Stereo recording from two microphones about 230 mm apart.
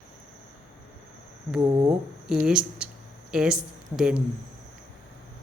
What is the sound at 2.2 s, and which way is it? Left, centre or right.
Speech, centre.